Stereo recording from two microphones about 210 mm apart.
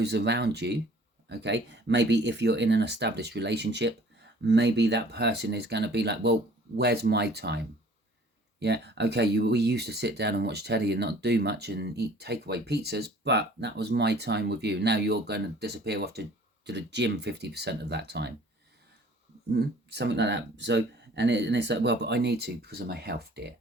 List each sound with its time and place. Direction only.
0.0 s speech: 55° right (ahead or behind)
19.5 s speech: 50° right (ahead or behind)